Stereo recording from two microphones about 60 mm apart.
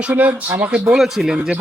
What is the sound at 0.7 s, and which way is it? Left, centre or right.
Speech, centre.